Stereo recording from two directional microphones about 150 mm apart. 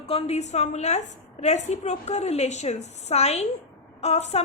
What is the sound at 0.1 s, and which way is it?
A woman's voice, 45° left (ahead or behind).